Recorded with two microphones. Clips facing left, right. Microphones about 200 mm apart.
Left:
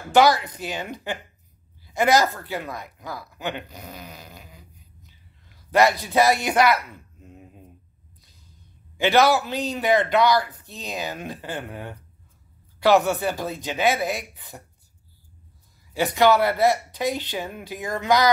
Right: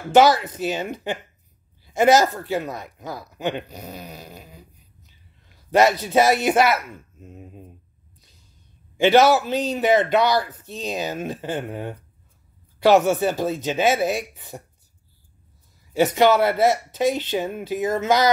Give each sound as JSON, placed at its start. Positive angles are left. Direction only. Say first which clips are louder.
{"t": 0.1, "sound": "a man's voice", "louder": "right 2 dB", "side_deg": -25}
{"t": 5.7, "sound": "a man's voice", "louder": "right 2 dB", "side_deg": -25}
{"t": 8.9, "sound": "a man's voice", "louder": "right 3 dB", "side_deg": -25}
{"t": 15.9, "sound": "a man's voice", "louder": "right 2 dB", "side_deg": -25}